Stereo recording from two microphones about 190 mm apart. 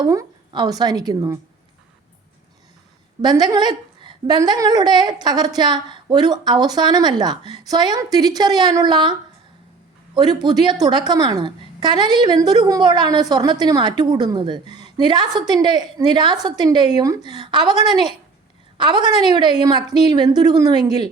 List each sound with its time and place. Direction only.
0.0 s a woman's voice: 20° right (ahead or behind)
3.2 s a woman's voice: 20° right (ahead or behind)
10.2 s a woman's voice: 20° right (ahead or behind)